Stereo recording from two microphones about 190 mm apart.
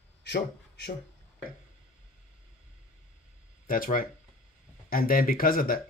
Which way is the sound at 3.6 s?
50° left (ahead or behind).